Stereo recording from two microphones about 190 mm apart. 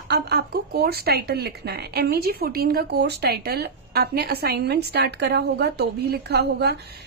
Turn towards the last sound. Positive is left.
turn(degrees=-60)  # may be behind; listen again after turning